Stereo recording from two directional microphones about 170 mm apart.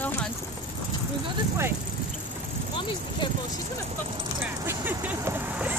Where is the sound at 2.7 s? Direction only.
30° left (ahead or behind).